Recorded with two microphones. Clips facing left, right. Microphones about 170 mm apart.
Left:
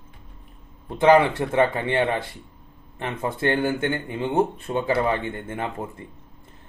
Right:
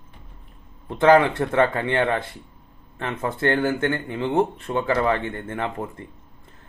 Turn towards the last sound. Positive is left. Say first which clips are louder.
# right 2 dB
turn(degrees=15)  # may be behind; listen again after turning